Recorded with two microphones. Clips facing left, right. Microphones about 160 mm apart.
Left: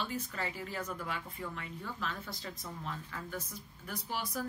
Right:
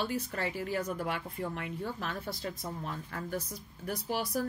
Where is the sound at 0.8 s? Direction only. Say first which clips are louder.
Right 4 dB; 40° right (ahead or behind).